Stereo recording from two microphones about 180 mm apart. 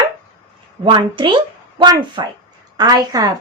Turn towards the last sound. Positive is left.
turn(degrees=-20)  # may be behind; listen again after turning